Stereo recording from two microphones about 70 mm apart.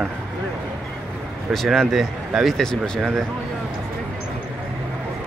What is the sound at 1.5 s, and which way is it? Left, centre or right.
Speech, centre.